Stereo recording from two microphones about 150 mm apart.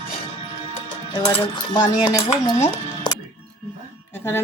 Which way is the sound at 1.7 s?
25° left (ahead or behind).